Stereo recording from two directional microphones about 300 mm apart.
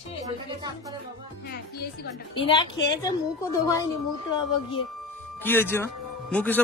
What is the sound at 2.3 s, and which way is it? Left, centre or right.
A woman's voice, centre.